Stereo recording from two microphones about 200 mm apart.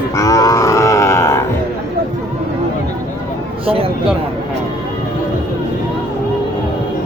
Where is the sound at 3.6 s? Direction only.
30° right (ahead or behind).